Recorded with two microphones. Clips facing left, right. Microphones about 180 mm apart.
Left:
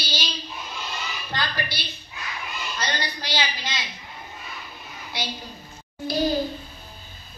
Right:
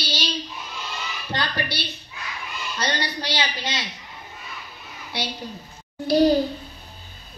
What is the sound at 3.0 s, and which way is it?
Speech, 70° right (ahead or behind).